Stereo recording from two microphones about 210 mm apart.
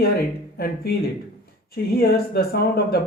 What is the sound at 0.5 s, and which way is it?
Speech, 50° left (ahead or behind).